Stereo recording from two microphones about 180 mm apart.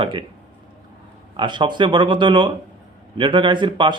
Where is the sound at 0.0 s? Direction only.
25° right (ahead or behind).